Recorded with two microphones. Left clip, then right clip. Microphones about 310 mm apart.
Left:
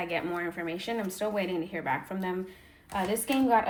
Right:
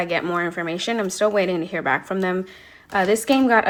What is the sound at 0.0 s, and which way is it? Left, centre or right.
Speech, centre.